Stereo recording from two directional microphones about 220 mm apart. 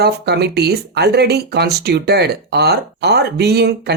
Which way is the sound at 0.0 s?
50° right (ahead or behind).